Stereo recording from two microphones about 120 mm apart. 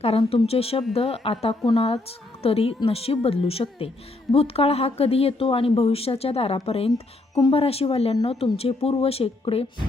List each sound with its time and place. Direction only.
0.0 s a woman's voice: 55° left (ahead or behind)